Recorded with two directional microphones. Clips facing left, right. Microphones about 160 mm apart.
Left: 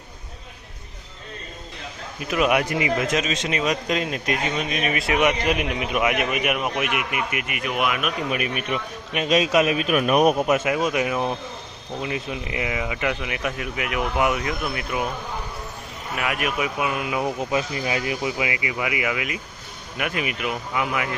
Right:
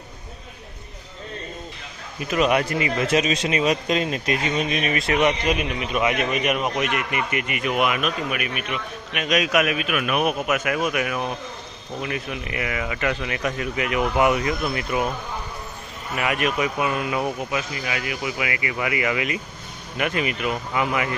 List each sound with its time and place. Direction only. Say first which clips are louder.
2.3 s speech: even; 10° left (ahead or behind)
3.0 s speech: right 3 dB; 5° right (ahead or behind)
3.9 s speech: right 1 dB; 5° left (ahead or behind)
5.5 s speech: even; 20° left (ahead or behind); by 8.1 s centre (ahead or behind)
8.3 s a man's voice: left 2 dB; 35° left (ahead or behind); by 15.0 s centre (ahead or behind)
16.1 s speech: right 2 dB; centre (ahead or behind)
17.5 s a man's voice: left 3 dB; 30° left (ahead or behind); by 21.1 s centre (ahead or behind)